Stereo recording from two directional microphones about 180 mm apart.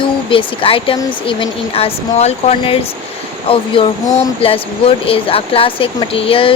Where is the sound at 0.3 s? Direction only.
30° left (ahead or behind).